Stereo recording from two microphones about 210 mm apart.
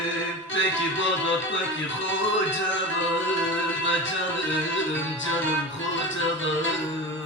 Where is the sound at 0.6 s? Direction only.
65° left (ahead or behind).